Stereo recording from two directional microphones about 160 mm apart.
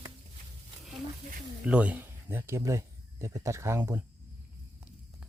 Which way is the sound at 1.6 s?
10° right (ahead or behind).